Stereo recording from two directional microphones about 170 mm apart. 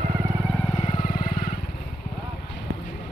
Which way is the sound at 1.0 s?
55° left (ahead or behind).